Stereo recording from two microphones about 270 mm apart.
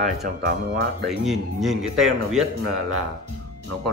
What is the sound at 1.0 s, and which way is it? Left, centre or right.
A man's voice, centre.